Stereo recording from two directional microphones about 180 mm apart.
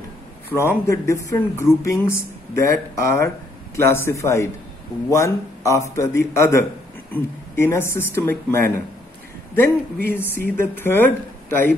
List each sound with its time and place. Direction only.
0.5 s speech: 15° left (ahead or behind)